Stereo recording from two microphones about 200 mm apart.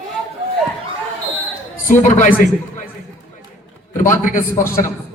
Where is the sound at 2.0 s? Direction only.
40° left (ahead or behind).